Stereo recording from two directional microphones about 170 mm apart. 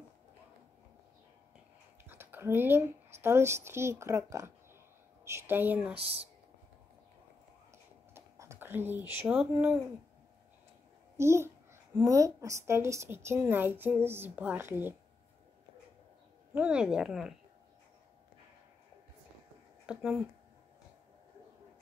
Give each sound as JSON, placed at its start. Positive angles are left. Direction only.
{"t": 2.0, "sound": "a woman's voice", "side_deg": -15}
{"t": 5.9, "sound": "speech", "side_deg": -35}
{"t": 8.1, "sound": "a sound", "side_deg": -15}
{"t": 9.4, "sound": "a woman's voice", "side_deg": -5}
{"t": 11.1, "sound": "a woman's voice", "side_deg": -15}
{"t": 16.5, "sound": "a woman's voice", "side_deg": -5}
{"t": 19.9, "sound": "a woman's voice", "side_deg": -5}